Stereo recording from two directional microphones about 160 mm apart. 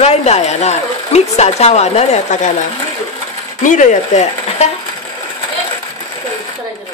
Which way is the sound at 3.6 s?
50° left (ahead or behind).